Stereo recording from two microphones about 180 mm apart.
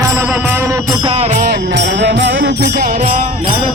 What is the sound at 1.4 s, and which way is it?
Music, 65° right (ahead or behind).